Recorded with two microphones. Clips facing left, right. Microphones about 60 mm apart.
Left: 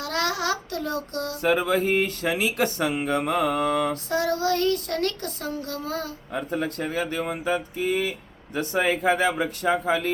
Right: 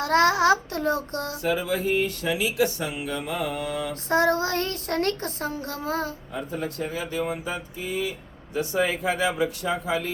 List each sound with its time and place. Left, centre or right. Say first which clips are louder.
0.0 s a child's voice: right 7 dB; right
1.4 s speech: left 4 dB; left
4.1 s a child's voice: right 4 dB; right
6.3 s speech: left 6 dB; left